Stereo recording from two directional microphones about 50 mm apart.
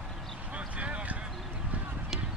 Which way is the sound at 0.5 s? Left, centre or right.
Right.